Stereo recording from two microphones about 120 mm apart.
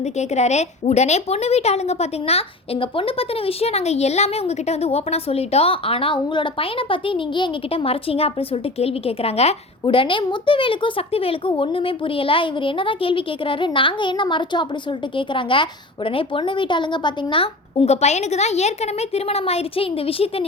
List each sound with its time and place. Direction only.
0.0 s a woman's voice: 70° left (ahead or behind)
9.8 s a woman's voice: 45° left (ahead or behind)